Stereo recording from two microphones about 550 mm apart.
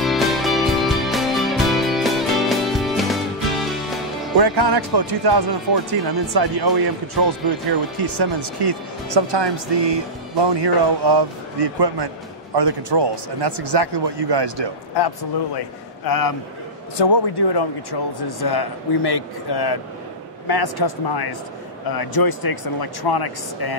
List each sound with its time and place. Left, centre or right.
0.0 s music: centre
4.4 s speech: right
8.0 s speech: right
15.0 s speech: left